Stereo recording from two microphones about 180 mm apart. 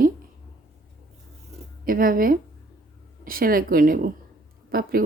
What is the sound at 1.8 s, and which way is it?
A woman's voice, 50° right (ahead or behind).